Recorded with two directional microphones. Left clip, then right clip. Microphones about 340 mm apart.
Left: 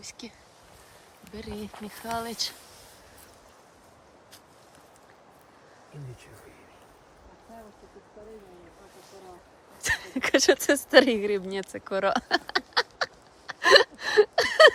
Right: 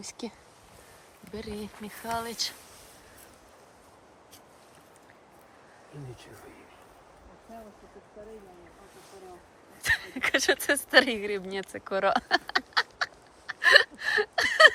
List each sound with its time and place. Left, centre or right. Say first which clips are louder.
0.0 s speech: right 3 dB; centre
9.8 s speech: right 1 dB; centre
13.5 s a sound: left 1 dB; centre